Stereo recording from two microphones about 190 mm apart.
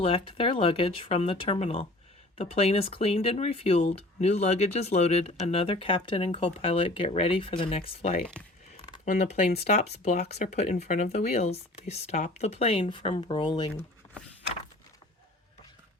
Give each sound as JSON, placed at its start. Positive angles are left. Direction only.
{"t": 0.0, "sound": "speech", "side_deg": 30}
{"t": 8.2, "sound": "speech", "side_deg": 5}
{"t": 9.0, "sound": "speech", "side_deg": 35}